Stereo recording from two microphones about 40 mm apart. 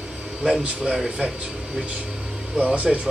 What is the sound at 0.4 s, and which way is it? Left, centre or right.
Speech, centre.